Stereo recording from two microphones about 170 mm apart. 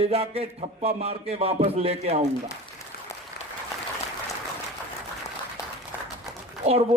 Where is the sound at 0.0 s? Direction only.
35° right (ahead or behind).